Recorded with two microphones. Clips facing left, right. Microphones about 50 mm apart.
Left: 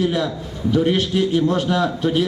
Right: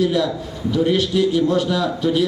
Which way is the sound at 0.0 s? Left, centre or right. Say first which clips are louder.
Right 2 dB; left.